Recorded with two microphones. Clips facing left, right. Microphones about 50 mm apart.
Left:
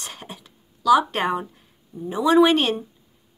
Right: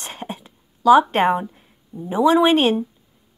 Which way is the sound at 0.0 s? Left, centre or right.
Right.